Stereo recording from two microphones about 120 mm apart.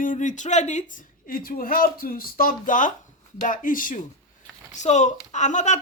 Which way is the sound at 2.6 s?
90° left.